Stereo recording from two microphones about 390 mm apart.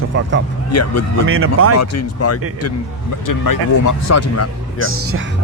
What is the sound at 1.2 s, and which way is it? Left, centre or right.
Speech, right.